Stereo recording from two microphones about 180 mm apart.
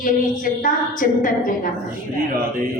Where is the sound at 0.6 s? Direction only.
50° left (ahead or behind).